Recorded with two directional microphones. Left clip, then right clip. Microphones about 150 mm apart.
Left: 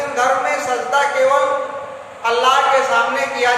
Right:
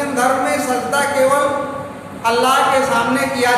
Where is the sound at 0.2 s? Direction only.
15° left (ahead or behind).